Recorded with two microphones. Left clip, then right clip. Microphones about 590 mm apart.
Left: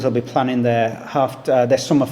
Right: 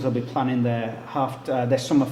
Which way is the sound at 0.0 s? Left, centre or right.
Left.